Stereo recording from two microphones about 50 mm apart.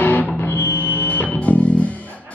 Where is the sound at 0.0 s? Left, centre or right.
Left.